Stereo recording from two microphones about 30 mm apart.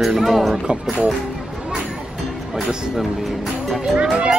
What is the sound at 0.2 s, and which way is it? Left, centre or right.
Speech, centre.